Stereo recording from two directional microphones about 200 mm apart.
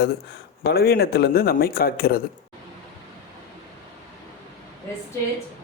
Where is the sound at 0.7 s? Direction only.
50° left (ahead or behind).